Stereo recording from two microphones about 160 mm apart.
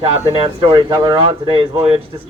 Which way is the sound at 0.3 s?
30° right (ahead or behind).